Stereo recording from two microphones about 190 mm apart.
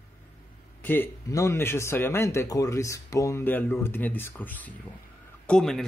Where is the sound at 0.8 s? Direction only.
10° left (ahead or behind).